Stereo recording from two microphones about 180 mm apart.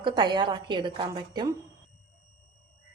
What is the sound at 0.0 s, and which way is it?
A woman's voice, 25° right (ahead or behind).